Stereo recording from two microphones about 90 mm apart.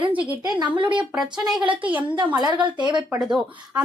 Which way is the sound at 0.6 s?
65° right (ahead or behind).